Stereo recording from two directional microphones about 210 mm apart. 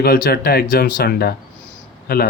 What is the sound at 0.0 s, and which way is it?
Speech, 45° left (ahead or behind).